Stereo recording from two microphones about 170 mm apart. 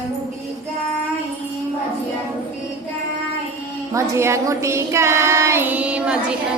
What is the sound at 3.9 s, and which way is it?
Child singing, 15° right (ahead or behind).